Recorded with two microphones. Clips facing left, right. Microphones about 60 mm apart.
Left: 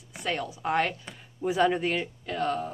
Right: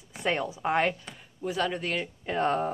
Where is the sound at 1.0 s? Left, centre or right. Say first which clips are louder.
Left 4 dB; centre.